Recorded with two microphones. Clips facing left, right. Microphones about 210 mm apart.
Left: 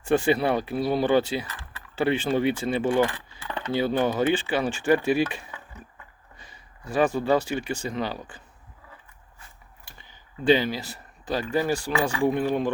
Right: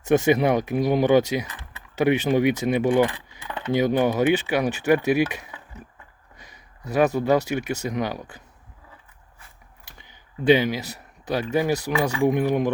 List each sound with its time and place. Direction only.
0.1 s speech: 15° right (ahead or behind)
7.0 s speech: 15° right (ahead or behind)
10.1 s a sound: 15° right (ahead or behind)
11.3 s speech: 15° right (ahead or behind)